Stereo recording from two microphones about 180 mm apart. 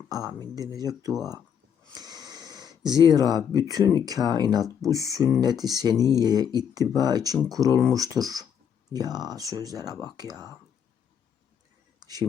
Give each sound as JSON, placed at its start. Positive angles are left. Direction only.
{"t": 0.1, "sound": "speech", "side_deg": -20}
{"t": 1.9, "sound": "a sound", "side_deg": -20}
{"t": 3.1, "sound": "speech", "side_deg": -20}
{"t": 5.9, "sound": "speech", "side_deg": 15}
{"t": 6.1, "sound": "speech", "side_deg": -20}
{"t": 11.9, "sound": "a sound", "side_deg": -20}